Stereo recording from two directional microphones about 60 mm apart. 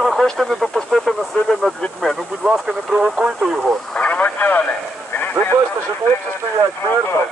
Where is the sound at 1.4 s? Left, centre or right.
Left.